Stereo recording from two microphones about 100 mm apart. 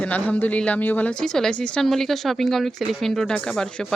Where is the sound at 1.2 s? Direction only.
5° left (ahead or behind).